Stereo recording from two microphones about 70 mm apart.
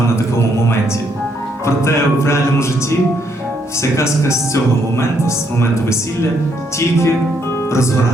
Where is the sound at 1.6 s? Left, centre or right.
Left.